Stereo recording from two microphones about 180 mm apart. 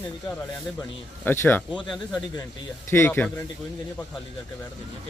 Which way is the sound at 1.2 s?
10° left (ahead or behind).